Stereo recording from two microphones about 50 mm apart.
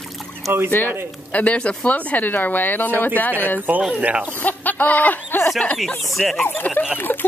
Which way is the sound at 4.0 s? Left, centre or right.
Right.